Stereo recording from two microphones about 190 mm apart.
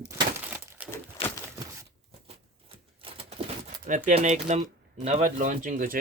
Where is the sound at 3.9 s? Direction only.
40° right (ahead or behind).